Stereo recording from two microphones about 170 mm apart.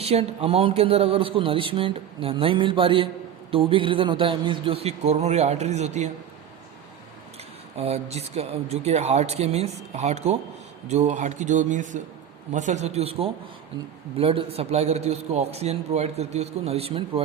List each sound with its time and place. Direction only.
0.0 s speech: 35° right (ahead or behind)
7.8 s speech: 40° right (ahead or behind)